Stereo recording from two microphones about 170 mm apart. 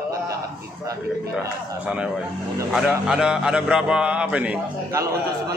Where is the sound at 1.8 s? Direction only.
5° right (ahead or behind).